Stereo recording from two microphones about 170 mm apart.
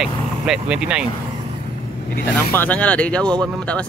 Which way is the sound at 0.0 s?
5° right (ahead or behind).